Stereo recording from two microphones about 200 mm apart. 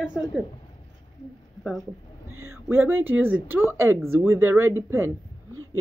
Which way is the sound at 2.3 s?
90° right.